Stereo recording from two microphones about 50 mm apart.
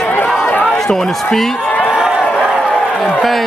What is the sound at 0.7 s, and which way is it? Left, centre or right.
Speech, centre.